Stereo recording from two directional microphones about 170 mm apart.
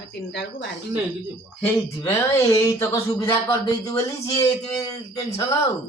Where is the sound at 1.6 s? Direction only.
15° left (ahead or behind).